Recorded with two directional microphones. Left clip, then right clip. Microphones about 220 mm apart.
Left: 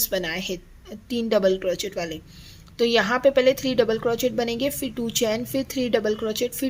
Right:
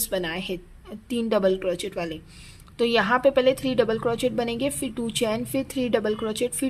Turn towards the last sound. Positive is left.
turn(degrees=-5)  # may be behind; listen again after turning